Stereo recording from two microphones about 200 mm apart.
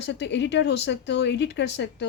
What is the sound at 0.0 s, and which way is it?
Speech, 60° left (ahead or behind).